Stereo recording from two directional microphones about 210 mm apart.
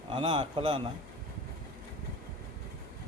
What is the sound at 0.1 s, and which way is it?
Speech, 25° right (ahead or behind).